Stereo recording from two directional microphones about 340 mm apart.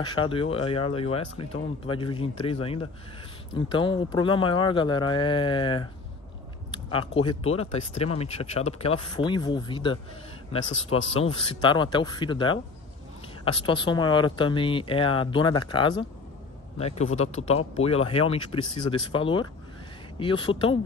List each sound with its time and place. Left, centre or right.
0.0 s speech: centre
11.1 s speech: centre